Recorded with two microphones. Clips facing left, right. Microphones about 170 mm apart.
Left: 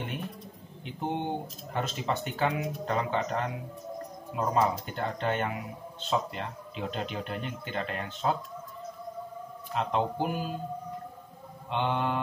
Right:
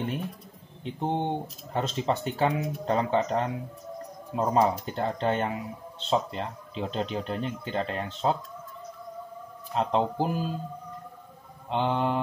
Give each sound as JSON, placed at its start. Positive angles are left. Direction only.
{"t": 0.8, "sound": "speech", "side_deg": -30}
{"t": 9.8, "sound": "speech", "side_deg": -30}
{"t": 11.7, "sound": "speech", "side_deg": -30}